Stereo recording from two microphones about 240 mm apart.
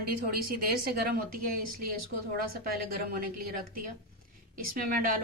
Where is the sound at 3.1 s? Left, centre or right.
Right.